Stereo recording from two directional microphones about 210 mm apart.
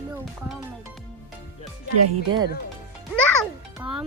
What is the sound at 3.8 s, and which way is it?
Music, 5° right (ahead or behind).